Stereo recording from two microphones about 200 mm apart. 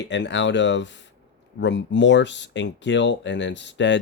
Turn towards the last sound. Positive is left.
turn(degrees=65)  # may be behind; listen again after turning